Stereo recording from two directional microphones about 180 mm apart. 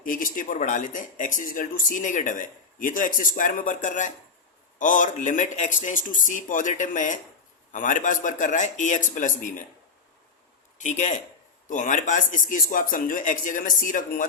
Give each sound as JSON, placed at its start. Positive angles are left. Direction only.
{"t": 0.0, "sound": "speech", "side_deg": 50}
{"t": 10.8, "sound": "speech", "side_deg": 40}